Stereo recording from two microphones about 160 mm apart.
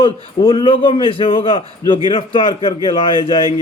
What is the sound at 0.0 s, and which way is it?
A man's voice, 30° left (ahead or behind).